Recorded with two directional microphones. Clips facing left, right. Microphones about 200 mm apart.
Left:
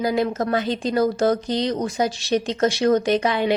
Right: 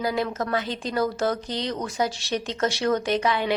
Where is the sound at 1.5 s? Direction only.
20° left (ahead or behind).